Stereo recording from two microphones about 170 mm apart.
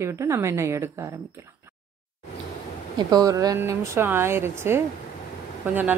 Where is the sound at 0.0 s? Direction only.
15° right (ahead or behind).